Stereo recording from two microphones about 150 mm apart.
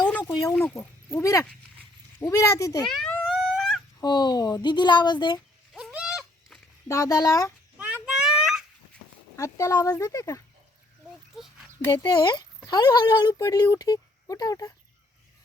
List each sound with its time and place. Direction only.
0.3 s speech: 20° left (ahead or behind)
2.8 s a sound: 5° left (ahead or behind)
4.0 s speech: 30° left (ahead or behind)
5.7 s goat: 5° right (ahead or behind)
6.8 s speech: 20° left (ahead or behind)
7.8 s a sound: 10° right (ahead or behind)
9.3 s speech: 20° left (ahead or behind)
11.3 s a sound: centre (ahead or behind)
11.9 s speech: 30° left (ahead or behind)